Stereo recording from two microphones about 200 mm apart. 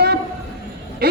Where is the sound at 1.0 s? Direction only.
50° right (ahead or behind).